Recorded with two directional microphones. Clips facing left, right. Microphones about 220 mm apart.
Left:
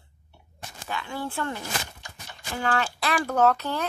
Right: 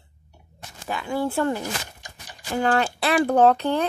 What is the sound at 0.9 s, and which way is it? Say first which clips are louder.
Speech: right 7 dB; 35° right (ahead or behind).